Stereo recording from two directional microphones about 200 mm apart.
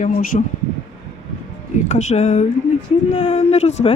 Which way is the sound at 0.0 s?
40° left (ahead or behind).